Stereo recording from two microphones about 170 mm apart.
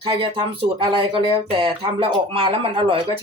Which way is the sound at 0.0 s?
30° right (ahead or behind).